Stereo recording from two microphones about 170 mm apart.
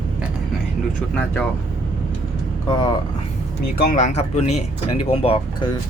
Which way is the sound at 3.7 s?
55° left (ahead or behind).